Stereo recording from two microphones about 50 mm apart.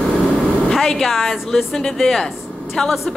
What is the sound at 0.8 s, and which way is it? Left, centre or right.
A woman's voice, centre.